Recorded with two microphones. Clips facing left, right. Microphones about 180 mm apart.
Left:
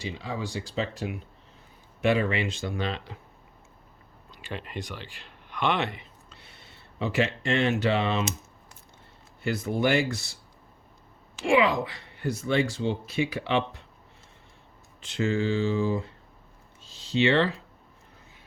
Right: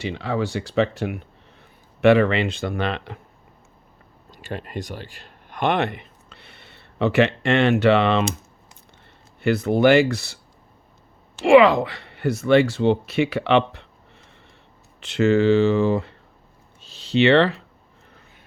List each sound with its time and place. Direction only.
0.0 s speech: 70° right (ahead or behind)
4.3 s speech: 45° right (ahead or behind); by 8.2 s 70° right (ahead or behind)
9.4 s speech: 65° right (ahead or behind)
11.4 s speech: 70° right (ahead or behind)
15.0 s speech: 70° right (ahead or behind)
16.8 s a sound: 65° right (ahead or behind)